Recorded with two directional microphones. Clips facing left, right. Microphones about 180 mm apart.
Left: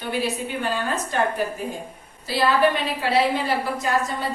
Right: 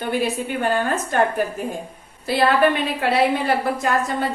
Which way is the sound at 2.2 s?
55° right (ahead or behind).